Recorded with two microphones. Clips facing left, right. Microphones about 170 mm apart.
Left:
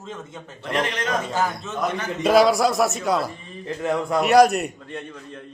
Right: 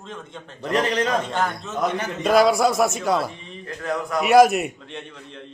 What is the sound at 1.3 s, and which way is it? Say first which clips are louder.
A man's voice: even; 5° left (ahead or behind).